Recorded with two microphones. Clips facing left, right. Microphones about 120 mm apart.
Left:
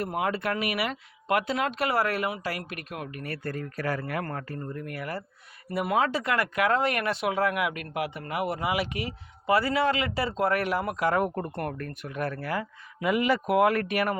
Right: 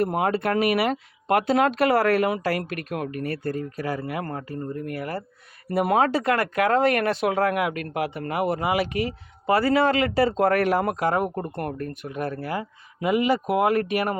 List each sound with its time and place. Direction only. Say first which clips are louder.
0.0 s speech: right 6 dB; 40° right (ahead or behind)
5.7 s speech: right 5 dB; 45° right (ahead or behind)
11.2 s speech: right 1 dB; 20° right (ahead or behind)